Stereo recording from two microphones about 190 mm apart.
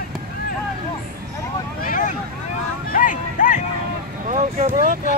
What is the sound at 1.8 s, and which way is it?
Vehicle, 45° left (ahead or behind).